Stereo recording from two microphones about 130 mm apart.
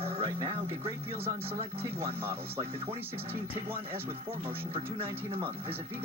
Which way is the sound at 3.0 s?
15° right (ahead or behind).